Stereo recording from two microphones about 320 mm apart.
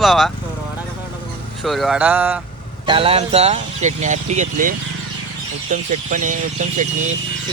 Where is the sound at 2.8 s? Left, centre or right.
Centre.